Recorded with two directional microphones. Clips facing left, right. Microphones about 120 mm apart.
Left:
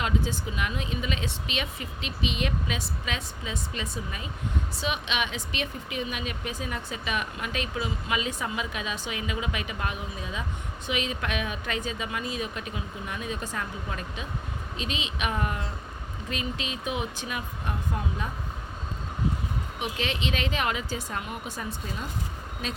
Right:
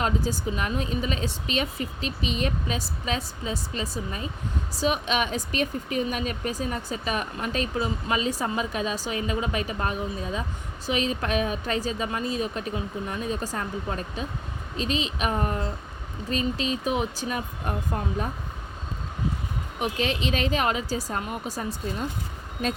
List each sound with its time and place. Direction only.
0.0 s speech: 40° right (ahead or behind)
19.8 s speech: 40° right (ahead or behind)